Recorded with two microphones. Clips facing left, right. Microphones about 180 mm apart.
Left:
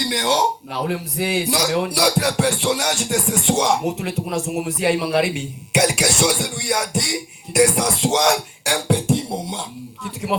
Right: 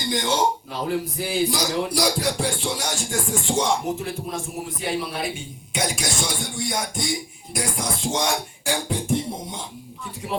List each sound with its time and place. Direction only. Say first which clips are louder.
0.1 s a man's voice: even; 70° left (ahead or behind)